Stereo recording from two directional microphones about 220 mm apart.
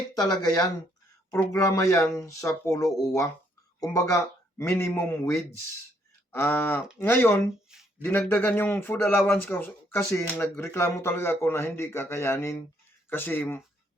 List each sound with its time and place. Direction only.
0.1 s speech: 15° left (ahead or behind)
7.7 s a sound: 5° right (ahead or behind)
8.0 s speech: 10° left (ahead or behind)